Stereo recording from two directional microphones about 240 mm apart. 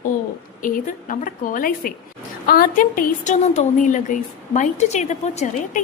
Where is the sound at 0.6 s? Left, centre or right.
Left.